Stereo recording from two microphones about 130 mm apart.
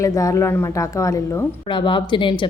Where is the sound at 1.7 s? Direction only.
40° left (ahead or behind).